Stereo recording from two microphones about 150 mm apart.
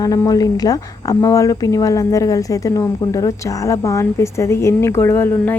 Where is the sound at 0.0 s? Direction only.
25° left (ahead or behind).